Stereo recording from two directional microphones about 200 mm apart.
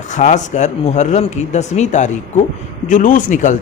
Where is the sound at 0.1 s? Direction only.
35° left (ahead or behind).